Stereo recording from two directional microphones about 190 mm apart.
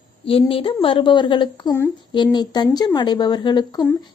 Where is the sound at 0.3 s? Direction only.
30° left (ahead or behind).